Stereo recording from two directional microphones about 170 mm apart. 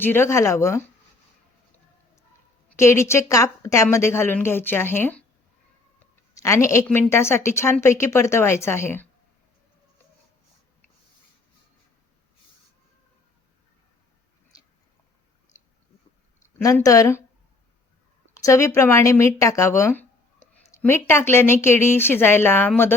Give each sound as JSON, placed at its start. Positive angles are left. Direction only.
{"t": 0.0, "sound": "a woman's voice", "side_deg": 15}
{"t": 2.7, "sound": "a woman's voice", "side_deg": 15}
{"t": 6.3, "sound": "a woman's voice", "side_deg": 20}
{"t": 16.6, "sound": "a woman's voice", "side_deg": 20}
{"t": 18.3, "sound": "a woman's voice", "side_deg": 20}